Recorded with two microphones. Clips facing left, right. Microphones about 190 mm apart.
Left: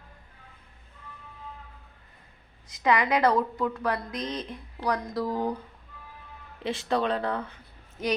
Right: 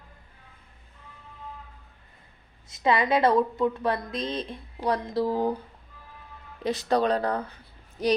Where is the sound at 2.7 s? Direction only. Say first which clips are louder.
Right 1 dB; 25° right (ahead or behind).